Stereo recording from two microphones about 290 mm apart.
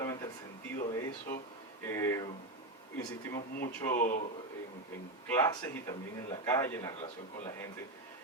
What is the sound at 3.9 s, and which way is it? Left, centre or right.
Speech, left.